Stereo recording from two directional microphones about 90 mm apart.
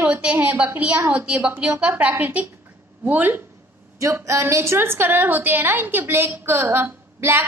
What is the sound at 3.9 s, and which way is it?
A woman's voice, 35° right (ahead or behind).